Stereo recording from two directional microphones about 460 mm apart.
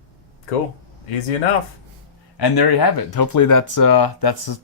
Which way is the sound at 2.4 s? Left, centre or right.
Left.